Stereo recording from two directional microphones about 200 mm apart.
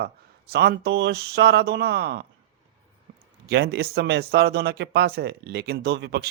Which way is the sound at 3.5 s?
55° right (ahead or behind).